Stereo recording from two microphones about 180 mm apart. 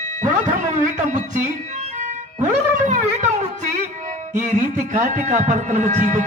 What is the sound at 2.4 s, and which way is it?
Music, 45° right (ahead or behind).